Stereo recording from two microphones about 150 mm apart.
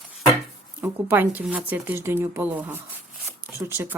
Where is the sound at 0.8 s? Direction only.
10° right (ahead or behind).